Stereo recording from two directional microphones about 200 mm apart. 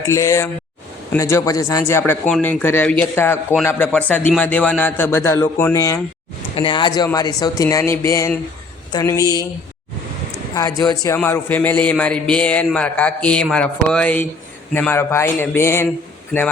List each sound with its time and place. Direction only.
0.1 s a man's voice: 15° left (ahead or behind)
10.5 s a man's voice: 20° left (ahead or behind)